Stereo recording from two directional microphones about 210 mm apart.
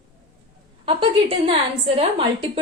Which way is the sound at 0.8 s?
25° right (ahead or behind).